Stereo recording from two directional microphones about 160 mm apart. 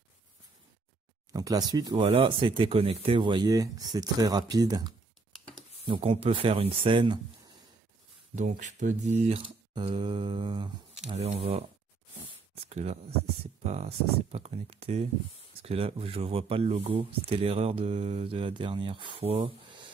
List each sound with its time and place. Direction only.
1.3 s speech: 25° right (ahead or behind)
2.0 s speech: 35° right (ahead or behind)
5.9 s speech: 35° right (ahead or behind)
8.4 s speech: 50° right (ahead or behind)
9.8 s speech: 30° right (ahead or behind)
11.1 s speech: 40° right (ahead or behind)